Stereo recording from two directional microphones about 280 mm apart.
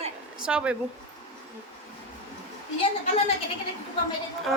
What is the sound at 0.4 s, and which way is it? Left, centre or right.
Speech, centre.